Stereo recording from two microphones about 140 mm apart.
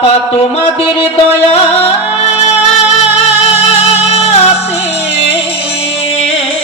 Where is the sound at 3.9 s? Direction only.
50° left (ahead or behind).